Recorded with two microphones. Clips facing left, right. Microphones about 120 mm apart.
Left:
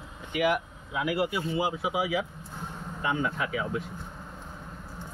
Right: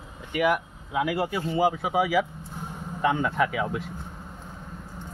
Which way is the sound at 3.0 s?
85° right.